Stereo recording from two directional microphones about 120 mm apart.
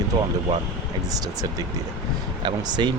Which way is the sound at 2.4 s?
40° right (ahead or behind).